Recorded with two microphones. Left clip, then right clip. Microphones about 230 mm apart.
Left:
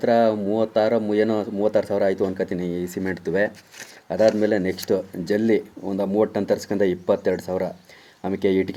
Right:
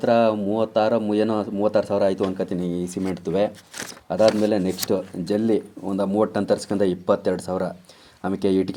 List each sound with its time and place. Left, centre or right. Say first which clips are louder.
0.0 s speech: even; right